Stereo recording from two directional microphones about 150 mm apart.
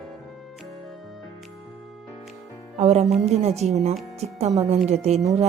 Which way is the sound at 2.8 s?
45° right (ahead or behind).